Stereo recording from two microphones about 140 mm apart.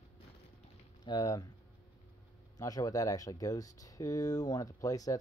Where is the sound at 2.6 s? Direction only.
25° left (ahead or behind).